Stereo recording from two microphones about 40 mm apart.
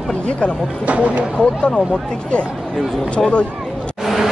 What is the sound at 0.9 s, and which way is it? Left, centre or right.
Speech, right.